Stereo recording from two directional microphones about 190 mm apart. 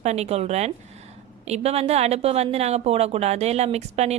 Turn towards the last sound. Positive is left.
turn(degrees=-35)  # may be behind; listen again after turning